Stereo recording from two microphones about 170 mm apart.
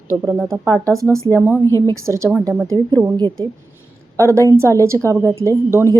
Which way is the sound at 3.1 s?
30° right (ahead or behind).